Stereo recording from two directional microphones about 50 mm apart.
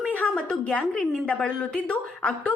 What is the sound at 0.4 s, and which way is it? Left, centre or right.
A woman's voice, left.